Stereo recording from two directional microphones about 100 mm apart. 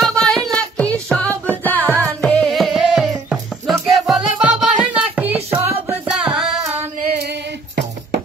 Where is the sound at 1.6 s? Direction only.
20° left (ahead or behind).